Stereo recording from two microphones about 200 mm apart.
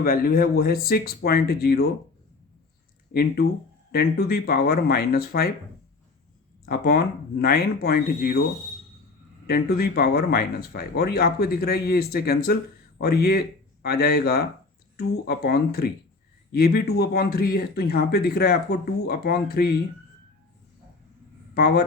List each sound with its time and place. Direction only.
0.0 s speech: 50° left (ahead or behind)
3.1 s speech: 55° left (ahead or behind)
6.7 s speech: 50° left (ahead or behind)
9.5 s speech: 50° left (ahead or behind)
21.5 s speech: 55° left (ahead or behind)